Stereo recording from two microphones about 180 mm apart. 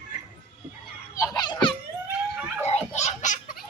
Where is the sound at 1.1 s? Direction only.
20° left (ahead or behind).